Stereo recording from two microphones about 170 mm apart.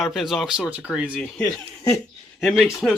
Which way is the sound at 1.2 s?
5° left (ahead or behind).